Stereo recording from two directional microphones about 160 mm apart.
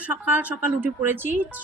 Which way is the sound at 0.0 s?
10° right (ahead or behind).